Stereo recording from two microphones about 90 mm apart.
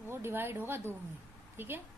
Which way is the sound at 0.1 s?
25° right (ahead or behind).